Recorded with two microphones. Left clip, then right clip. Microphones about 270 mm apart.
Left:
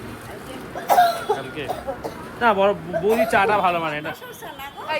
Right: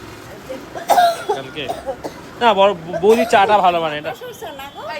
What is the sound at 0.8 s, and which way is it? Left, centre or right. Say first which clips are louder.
Cough: right 3 dB; right.